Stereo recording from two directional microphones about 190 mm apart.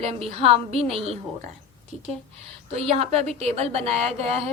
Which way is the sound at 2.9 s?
35° right (ahead or behind).